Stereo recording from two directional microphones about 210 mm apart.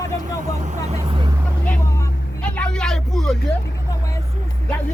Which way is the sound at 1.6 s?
5° left (ahead or behind).